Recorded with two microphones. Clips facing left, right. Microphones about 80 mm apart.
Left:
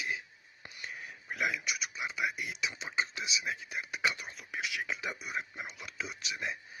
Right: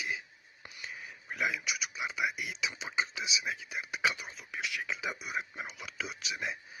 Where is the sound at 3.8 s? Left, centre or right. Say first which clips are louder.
Right 2 dB; centre.